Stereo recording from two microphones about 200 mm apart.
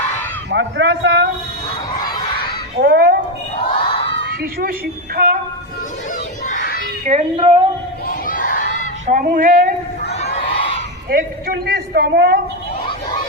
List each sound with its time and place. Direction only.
0.5 s speech: 60° right (ahead or behind)
2.7 s a child's voice: 55° right (ahead or behind)
3.8 s crowd: 25° left (ahead or behind)
5.1 s a woman's voice: 45° right (ahead or behind)
6.5 s a sound: 45° left (ahead or behind)
7.0 s speech: 35° right (ahead or behind)
8.0 s crowd: 45° left (ahead or behind)
9.0 s speech: 40° right (ahead or behind)
10.1 s crowd: 35° left (ahead or behind)
11.1 s a woman's voice: 50° right (ahead or behind)